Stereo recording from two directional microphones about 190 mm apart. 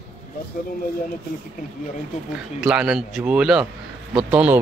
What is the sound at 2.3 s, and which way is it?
Speech, 5° right (ahead or behind).